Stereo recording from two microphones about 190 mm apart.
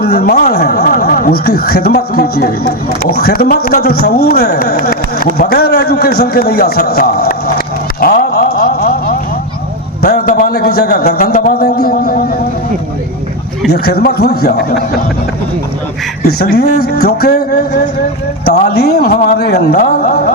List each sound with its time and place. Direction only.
0.0 s a man's voice: 55° left (ahead or behind)
8.0 s a sound: 50° left (ahead or behind)
10.0 s a man's voice: 50° left (ahead or behind)
13.7 s speech: 55° left (ahead or behind)
16.2 s speech: 55° left (ahead or behind)
18.7 s speech: 60° left (ahead or behind)